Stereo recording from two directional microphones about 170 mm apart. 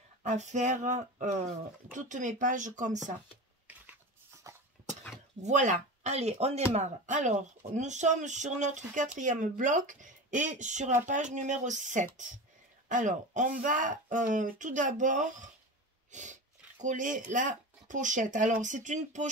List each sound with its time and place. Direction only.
0.2 s speech: 45° right (ahead or behind)
4.4 s a sound: 20° right (ahead or behind)
5.4 s speech: 45° right (ahead or behind)